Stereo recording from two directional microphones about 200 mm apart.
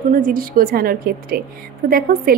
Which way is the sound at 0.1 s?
45° right (ahead or behind).